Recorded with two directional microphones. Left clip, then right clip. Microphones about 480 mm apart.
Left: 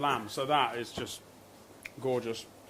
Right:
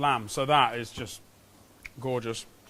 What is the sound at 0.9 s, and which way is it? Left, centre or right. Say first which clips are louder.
Speech: even; right.